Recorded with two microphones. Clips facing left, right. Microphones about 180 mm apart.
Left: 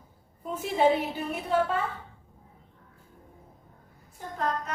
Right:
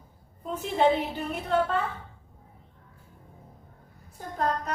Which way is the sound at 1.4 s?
10° left (ahead or behind).